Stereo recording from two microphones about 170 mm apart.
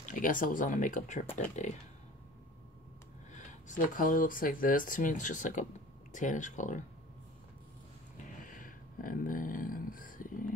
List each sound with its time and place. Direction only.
0.1 s speech: 50° left (ahead or behind)
3.3 s speech: 50° left (ahead or behind)
8.2 s a sound: 50° left (ahead or behind)